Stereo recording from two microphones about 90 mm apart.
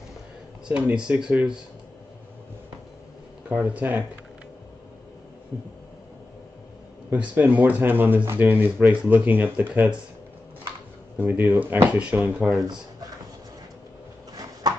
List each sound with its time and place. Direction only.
0.7 s speech: 10° right (ahead or behind)
3.4 s speech: 15° right (ahead or behind)
7.1 s speech: 20° right (ahead or behind)
11.1 s speech: 25° right (ahead or behind)